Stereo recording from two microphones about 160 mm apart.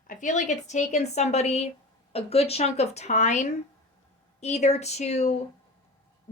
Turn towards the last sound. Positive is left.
turn(degrees=45)  # may be behind; listen again after turning